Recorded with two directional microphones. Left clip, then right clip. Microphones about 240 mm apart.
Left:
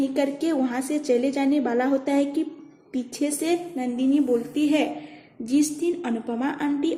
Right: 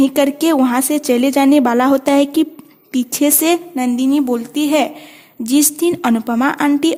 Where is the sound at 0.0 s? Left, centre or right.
Right.